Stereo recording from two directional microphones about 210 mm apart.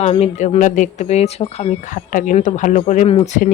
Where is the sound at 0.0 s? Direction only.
30° left (ahead or behind).